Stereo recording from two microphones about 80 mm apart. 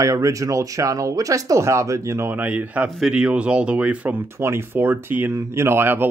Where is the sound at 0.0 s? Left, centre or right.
Right.